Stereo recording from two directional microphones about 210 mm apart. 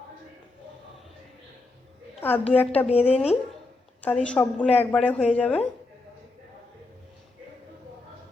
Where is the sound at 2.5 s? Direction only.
30° left (ahead or behind).